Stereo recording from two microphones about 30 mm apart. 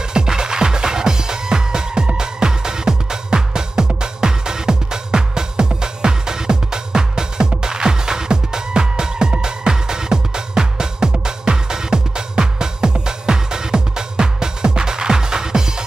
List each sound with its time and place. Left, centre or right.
0.1 s music: right